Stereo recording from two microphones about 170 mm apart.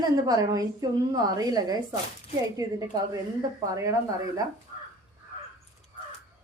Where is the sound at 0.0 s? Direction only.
20° right (ahead or behind).